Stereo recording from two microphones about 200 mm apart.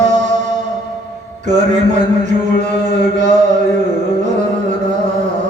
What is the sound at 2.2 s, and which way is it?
Music, 35° right (ahead or behind).